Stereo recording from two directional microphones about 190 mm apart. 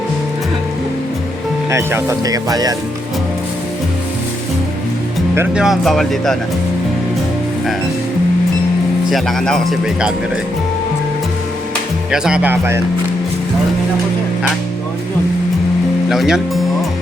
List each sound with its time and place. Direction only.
1.7 s speech: 15° right (ahead or behind)
5.3 s speech: 10° right (ahead or behind)
5.6 s speech: centre (ahead or behind)
9.0 s speech: centre (ahead or behind)
12.1 s speech: 5° right (ahead or behind)
16.0 s speech: centre (ahead or behind)